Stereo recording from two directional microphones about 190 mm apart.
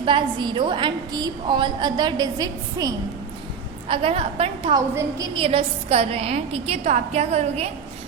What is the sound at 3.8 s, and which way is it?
A woman's voice, 30° right (ahead or behind).